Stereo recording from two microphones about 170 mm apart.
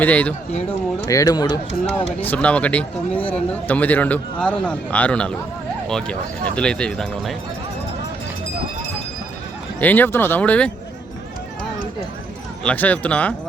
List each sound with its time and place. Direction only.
0.0 s a man's voice: 10° left (ahead or behind)
1.0 s speech: 20° left (ahead or behind)
2.2 s a man's voice: 10° left (ahead or behind)
9.8 s a man's voice: 10° left (ahead or behind)
12.6 s a man's voice: 10° left (ahead or behind)